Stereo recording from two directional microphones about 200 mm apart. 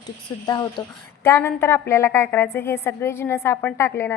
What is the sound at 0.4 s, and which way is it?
A woman's voice, 20° left (ahead or behind).